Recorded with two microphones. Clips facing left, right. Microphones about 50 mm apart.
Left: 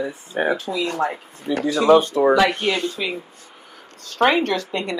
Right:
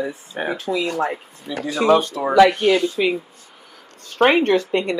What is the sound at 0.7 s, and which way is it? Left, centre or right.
Speech, centre.